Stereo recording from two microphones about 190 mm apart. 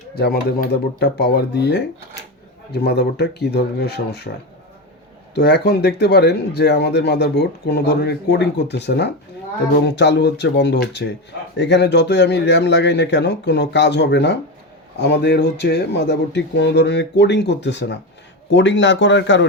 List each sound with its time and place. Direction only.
0.2 s speech: 60° left (ahead or behind)
5.3 s speech: 60° left (ahead or behind)